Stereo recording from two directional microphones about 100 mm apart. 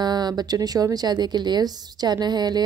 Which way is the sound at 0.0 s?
45° right (ahead or behind).